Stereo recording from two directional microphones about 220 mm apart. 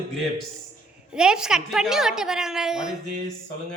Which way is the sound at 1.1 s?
5° right (ahead or behind).